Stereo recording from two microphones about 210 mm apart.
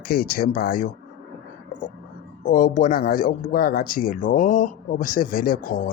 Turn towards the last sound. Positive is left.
turn(degrees=40)  # may be behind; listen again after turning